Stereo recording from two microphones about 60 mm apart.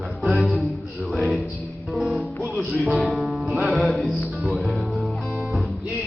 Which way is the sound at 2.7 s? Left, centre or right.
Right.